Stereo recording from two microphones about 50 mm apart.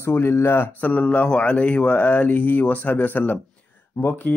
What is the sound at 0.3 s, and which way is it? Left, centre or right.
Speech, left.